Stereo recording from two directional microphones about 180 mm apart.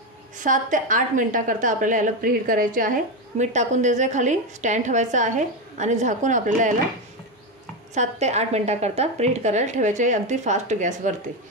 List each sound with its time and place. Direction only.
0.4 s a woman's voice: 45° right (ahead or behind)
7.9 s a woman's voice: 40° right (ahead or behind)